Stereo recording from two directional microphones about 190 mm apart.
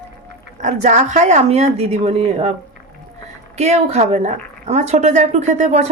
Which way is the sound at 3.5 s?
35° right (ahead or behind).